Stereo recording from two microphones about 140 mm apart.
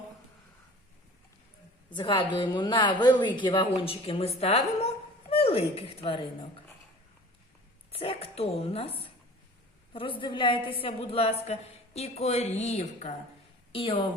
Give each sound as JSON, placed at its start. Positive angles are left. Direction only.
{"t": 2.0, "sound": "speech", "side_deg": 35}
{"t": 7.9, "sound": "a woman's voice", "side_deg": 45}
{"t": 13.7, "sound": "speech", "side_deg": 40}